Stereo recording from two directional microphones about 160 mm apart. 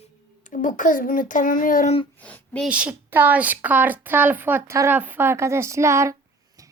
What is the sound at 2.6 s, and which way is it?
A woman's voice, 5° right (ahead or behind).